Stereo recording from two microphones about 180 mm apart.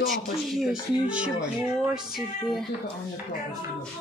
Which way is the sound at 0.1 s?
Centre (ahead or behind).